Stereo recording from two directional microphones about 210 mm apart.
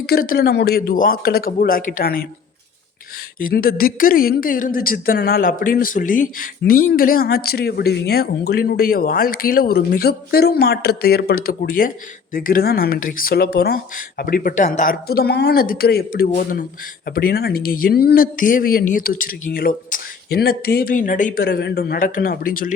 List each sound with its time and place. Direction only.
0.0 s speech: 45° left (ahead or behind)
3.3 s speech: 45° left (ahead or behind)